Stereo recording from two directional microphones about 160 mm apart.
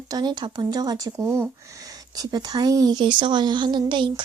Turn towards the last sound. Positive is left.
turn(degrees=-30)  # may be behind; listen again after turning